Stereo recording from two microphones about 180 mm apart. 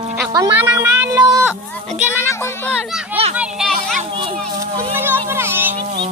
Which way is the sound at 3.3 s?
Centre (ahead or behind).